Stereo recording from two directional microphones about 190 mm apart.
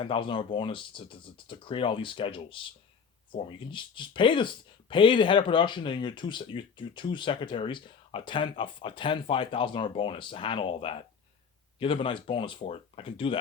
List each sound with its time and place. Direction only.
0.0 s speech: 25° left (ahead or behind)